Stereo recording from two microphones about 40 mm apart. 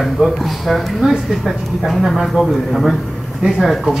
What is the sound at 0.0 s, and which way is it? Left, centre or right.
Speech, centre.